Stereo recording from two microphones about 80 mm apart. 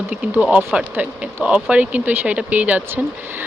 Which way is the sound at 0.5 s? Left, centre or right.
Centre.